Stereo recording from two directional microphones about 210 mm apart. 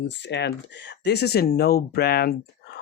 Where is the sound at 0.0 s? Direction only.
55° left (ahead or behind).